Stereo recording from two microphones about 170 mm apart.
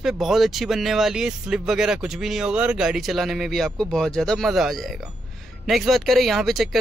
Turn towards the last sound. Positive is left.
turn(degrees=0)  # may be behind; listen again after turning